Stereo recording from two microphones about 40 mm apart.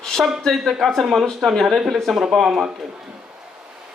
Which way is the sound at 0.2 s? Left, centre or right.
Centre.